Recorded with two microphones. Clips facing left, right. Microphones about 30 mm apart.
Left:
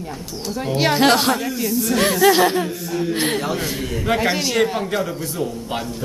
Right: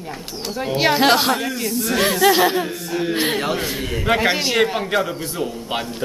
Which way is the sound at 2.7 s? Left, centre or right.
Right.